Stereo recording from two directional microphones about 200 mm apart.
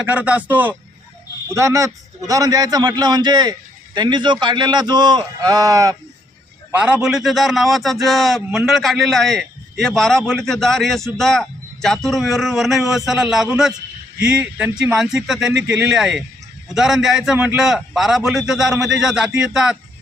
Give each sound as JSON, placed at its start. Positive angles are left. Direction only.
{"t": 0.1, "sound": "a man's voice", "side_deg": -5}
{"t": 6.7, "sound": "a man's voice", "side_deg": -5}